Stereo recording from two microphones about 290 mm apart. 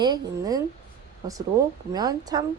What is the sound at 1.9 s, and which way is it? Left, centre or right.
Speech, centre.